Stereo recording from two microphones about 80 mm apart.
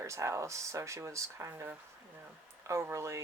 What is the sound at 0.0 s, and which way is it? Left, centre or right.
Speech, right.